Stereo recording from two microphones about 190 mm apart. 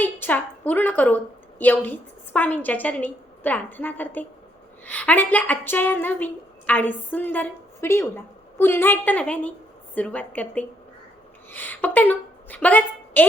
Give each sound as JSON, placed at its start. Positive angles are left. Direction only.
{"t": 0.0, "sound": "a woman's voice", "side_deg": 10}